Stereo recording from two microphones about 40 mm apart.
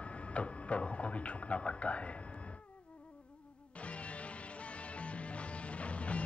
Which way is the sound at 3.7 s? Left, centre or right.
Left.